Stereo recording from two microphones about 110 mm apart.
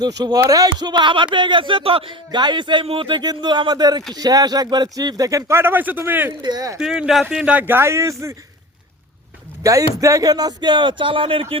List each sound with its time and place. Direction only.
0.0 s speech: 35° right (ahead or behind)
2.8 s speech: 55° right (ahead or behind); by 6.3 s 20° right (ahead or behind)
6.4 s speech: 35° right (ahead or behind)
6.7 s speech: 5° right (ahead or behind); by 8.1 s 25° right (ahead or behind)
9.6 s speech: 30° right (ahead or behind); by 11.6 s 55° right (ahead or behind)